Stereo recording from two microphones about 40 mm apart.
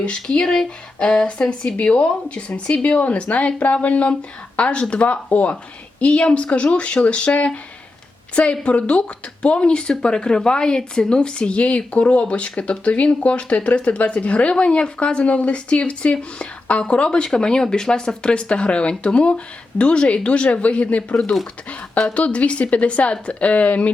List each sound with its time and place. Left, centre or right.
0.0 s speech: left
0.4 s speech: centre; by 7.6 s left
8.6 s speech: left